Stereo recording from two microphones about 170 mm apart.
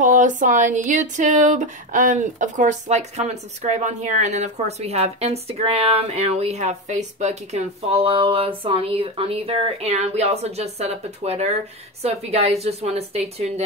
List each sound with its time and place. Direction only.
0.0 s speech: 50° right (ahead or behind)